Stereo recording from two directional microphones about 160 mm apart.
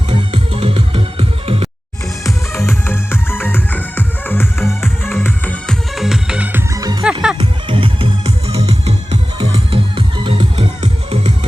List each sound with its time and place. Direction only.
0.1 s music: 35° right (ahead or behind)
2.2 s music: 15° left (ahead or behind)
6.0 s music: 5° right (ahead or behind)
7.3 s music: 30° right (ahead or behind)